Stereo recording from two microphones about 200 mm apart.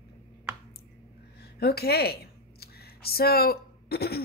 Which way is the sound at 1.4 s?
55° left (ahead or behind).